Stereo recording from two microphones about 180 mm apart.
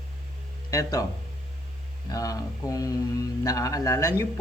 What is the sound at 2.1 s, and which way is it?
A man's voice, 20° left (ahead or behind).